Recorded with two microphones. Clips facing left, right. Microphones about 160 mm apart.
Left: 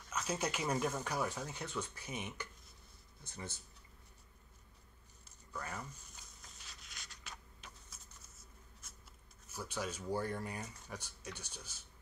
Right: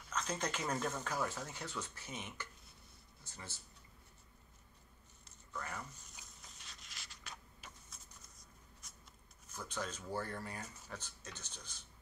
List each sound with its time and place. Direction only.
0.1 s speech: 10° left (ahead or behind)
6.1 s a sound: centre (ahead or behind)
9.5 s speech: 10° left (ahead or behind)